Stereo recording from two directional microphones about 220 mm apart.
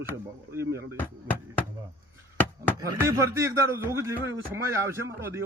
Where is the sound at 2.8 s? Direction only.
15° right (ahead or behind).